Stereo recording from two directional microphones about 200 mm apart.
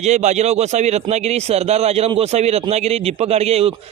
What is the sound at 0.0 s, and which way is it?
Speech, 35° right (ahead or behind).